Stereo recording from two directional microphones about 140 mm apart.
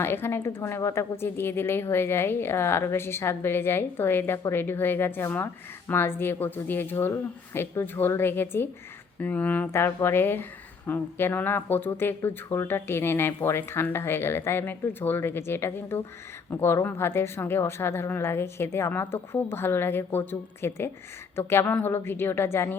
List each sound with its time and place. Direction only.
0.0 s a woman's voice: 15° left (ahead or behind)